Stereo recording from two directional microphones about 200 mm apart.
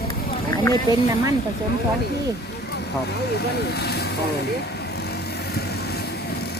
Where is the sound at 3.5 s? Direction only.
55° left (ahead or behind).